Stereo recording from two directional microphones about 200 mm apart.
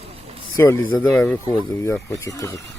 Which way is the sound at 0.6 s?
15° left (ahead or behind).